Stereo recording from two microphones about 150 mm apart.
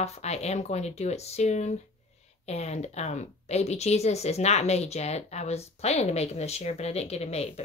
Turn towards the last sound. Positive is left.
turn(degrees=45)  # may be behind; listen again after turning